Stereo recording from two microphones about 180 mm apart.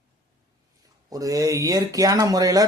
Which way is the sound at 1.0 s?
20° right (ahead or behind).